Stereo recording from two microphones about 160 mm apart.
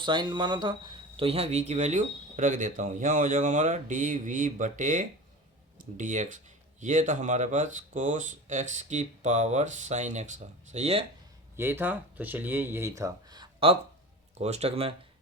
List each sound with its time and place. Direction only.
0.0 s speech: 30° right (ahead or behind)
11.5 s speech: 15° right (ahead or behind); by 13.7 s 30° right (ahead or behind)
14.3 s speech: 45° right (ahead or behind)